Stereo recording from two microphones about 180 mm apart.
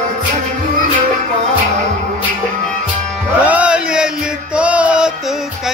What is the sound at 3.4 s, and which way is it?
Music, 5° right (ahead or behind).